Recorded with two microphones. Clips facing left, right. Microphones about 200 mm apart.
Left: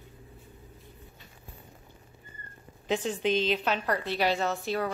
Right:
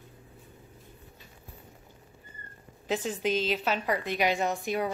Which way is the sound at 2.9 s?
5° right (ahead or behind).